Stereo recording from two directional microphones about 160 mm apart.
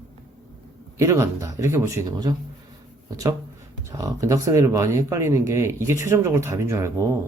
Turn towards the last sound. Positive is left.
turn(degrees=-20)  # may be behind; listen again after turning